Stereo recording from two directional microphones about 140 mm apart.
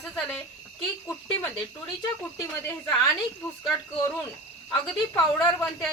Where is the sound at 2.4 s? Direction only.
20° left (ahead or behind).